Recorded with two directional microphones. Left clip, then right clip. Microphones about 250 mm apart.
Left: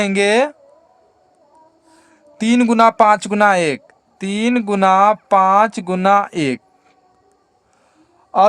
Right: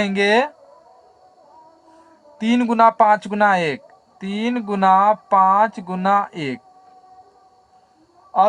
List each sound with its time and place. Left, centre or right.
0.0 s speech: left
2.4 s speech: left